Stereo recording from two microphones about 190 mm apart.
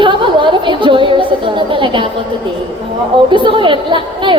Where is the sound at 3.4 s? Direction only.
25° right (ahead or behind).